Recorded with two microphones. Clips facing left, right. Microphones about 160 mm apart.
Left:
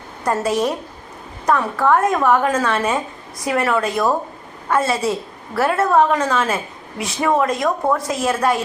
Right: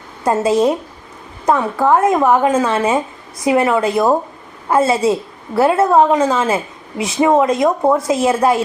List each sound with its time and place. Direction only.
0.3 s a woman's voice: 25° right (ahead or behind)